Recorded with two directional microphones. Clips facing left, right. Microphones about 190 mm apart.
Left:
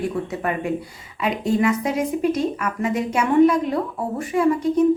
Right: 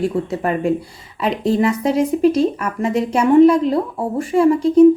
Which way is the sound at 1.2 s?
30° right (ahead or behind).